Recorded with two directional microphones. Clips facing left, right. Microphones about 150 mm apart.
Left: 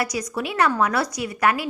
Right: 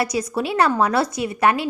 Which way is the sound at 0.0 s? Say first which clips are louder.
Right 4 dB; 30° right (ahead or behind).